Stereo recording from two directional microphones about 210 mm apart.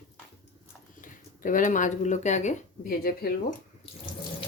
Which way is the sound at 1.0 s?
40° left (ahead or behind).